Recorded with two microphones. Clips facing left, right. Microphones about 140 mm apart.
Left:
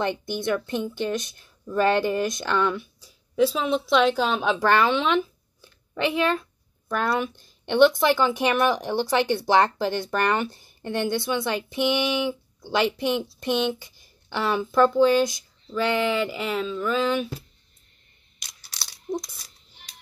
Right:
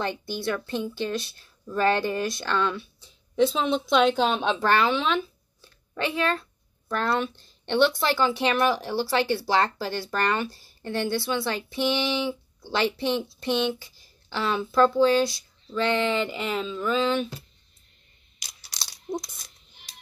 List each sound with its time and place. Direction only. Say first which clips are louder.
0.0 s a woman's voice: left 3 dB; 20° left (ahead or behind)
3.3 s a woman's voice: left 1 dB; 5° left (ahead or behind)
18.7 s coin: left 2 dB; 15° right (ahead or behind)